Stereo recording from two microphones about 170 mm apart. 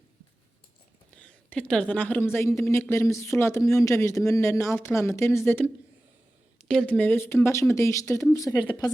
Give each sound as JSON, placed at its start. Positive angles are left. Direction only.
{"t": 1.1, "sound": "speech", "side_deg": 5}